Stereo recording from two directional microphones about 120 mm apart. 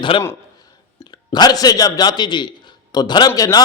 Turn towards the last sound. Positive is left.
turn(degrees=30)  # may be behind; listen again after turning